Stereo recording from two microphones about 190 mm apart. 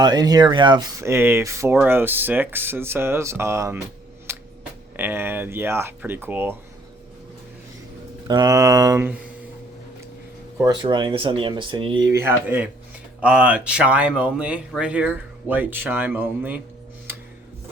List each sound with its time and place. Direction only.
0.0 s speech: 20° right (ahead or behind)
4.3 s a sound: 15° right (ahead or behind)
4.9 s speech: 10° right (ahead or behind)
8.3 s speech: 20° right (ahead or behind)
10.6 s speech: 20° right (ahead or behind)